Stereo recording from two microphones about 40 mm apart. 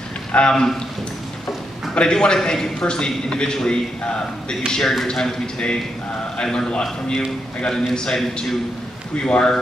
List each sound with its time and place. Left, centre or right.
0.3 s a man's voice: left
2.0 s a man's voice: left
9.2 s a man's voice: left